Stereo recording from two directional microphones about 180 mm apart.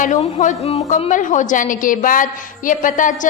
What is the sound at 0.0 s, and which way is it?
A woman's voice, 40° left (ahead or behind).